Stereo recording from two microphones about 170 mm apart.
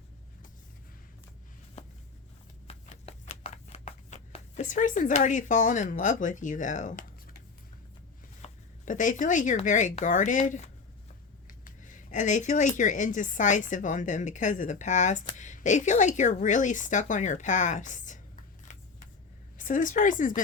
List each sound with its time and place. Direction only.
1.8 s a sound: 40° left (ahead or behind)
2.6 s shuffling cards: 40° left (ahead or behind)
8.4 s speech: 50° left (ahead or behind)
19.5 s speech: 50° left (ahead or behind)